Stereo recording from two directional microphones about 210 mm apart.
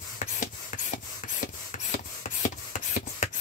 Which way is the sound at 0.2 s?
35° left (ahead or behind).